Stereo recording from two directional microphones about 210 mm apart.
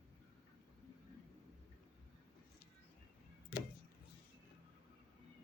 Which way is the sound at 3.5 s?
45° left (ahead or behind).